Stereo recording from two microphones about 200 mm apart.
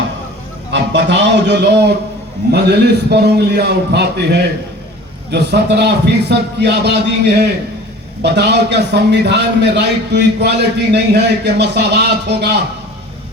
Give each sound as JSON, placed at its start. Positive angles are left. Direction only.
{"t": 0.7, "sound": "a man's voice", "side_deg": -60}